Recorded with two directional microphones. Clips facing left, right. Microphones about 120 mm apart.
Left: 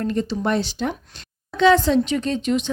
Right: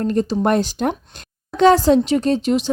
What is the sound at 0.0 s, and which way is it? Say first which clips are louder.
Speech: right 5 dB; 40° right (ahead or behind).